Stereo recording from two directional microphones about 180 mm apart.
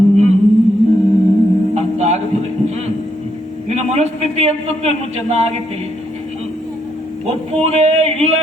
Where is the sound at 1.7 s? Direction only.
40° right (ahead or behind).